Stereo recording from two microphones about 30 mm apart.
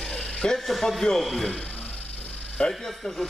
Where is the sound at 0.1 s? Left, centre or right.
Left.